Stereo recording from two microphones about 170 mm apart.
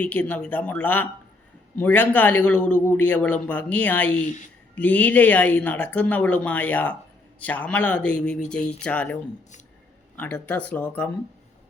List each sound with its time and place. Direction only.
0.0 s speech: 10° left (ahead or behind)
10.2 s speech: 10° left (ahead or behind)